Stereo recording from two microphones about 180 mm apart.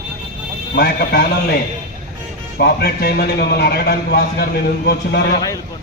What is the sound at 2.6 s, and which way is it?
A man's voice, 60° left (ahead or behind).